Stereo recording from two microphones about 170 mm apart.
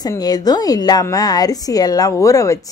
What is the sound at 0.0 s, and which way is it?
A woman's voice, 20° left (ahead or behind).